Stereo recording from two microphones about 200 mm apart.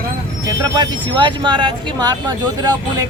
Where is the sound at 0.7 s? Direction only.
20° right (ahead or behind).